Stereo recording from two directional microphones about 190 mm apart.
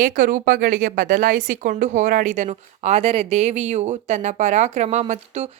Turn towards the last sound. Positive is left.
turn(degrees=-35)  # may be behind; listen again after turning